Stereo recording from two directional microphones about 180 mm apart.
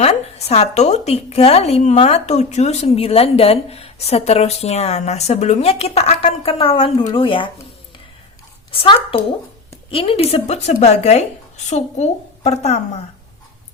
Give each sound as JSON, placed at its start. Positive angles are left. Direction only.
{"t": 0.0, "sound": "a woman's voice", "side_deg": 35}
{"t": 8.7, "sound": "a woman's voice", "side_deg": 30}